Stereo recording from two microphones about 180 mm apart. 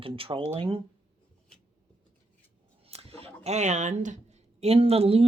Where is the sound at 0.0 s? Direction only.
30° right (ahead or behind).